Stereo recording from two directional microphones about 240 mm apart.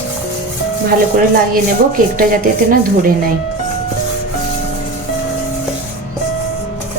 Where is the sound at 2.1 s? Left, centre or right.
Right.